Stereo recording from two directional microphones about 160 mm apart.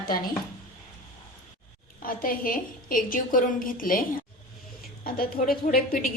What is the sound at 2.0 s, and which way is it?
A woman's voice, 60° left (ahead or behind).